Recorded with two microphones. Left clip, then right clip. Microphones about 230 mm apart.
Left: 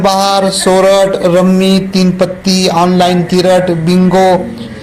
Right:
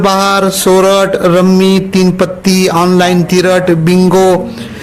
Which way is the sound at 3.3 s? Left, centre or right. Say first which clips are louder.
Even; right.